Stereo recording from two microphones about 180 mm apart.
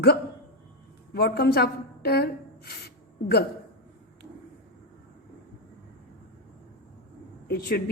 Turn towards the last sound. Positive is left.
turn(degrees=60)  # may be behind; listen again after turning